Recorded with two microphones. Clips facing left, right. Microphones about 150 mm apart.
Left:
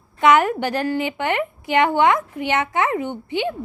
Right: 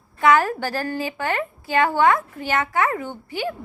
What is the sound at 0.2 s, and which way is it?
A woman's voice, 20° left (ahead or behind).